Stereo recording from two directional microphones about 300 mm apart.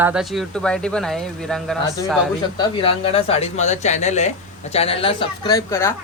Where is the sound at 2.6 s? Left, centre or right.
Centre.